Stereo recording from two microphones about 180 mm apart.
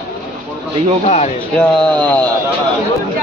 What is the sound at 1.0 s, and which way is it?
Speech, 40° left (ahead or behind).